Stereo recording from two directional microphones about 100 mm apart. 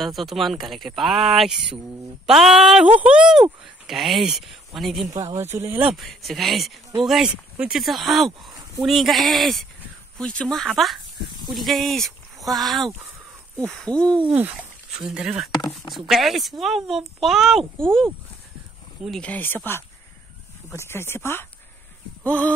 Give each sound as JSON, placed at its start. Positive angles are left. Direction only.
{"t": 0.0, "sound": "speech", "side_deg": 0}
{"t": 5.4, "sound": "speech", "side_deg": -25}
{"t": 5.9, "sound": "speech", "side_deg": 0}
{"t": 13.7, "sound": "hoot", "side_deg": 5}
{"t": 14.9, "sound": "speech", "side_deg": -5}
{"t": 15.5, "sound": "speech", "side_deg": 40}
{"t": 15.9, "sound": "speech", "side_deg": 0}
{"t": 17.7, "sound": "hoot", "side_deg": 5}
{"t": 19.2, "sound": "speech", "side_deg": 15}